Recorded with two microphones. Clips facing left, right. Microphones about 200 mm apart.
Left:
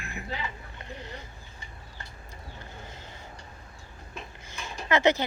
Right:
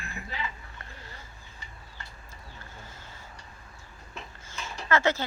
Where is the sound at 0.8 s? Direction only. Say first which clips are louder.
Left 7 dB; 20° left (ahead or behind).